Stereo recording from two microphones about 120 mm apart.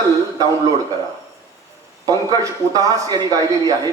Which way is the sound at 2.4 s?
30° right (ahead or behind).